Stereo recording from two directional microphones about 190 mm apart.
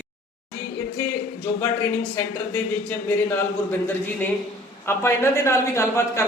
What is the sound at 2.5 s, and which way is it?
Speech, 10° left (ahead or behind).